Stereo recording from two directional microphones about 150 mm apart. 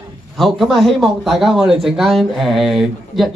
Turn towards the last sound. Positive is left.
turn(degrees=0)  # may be behind; listen again after turning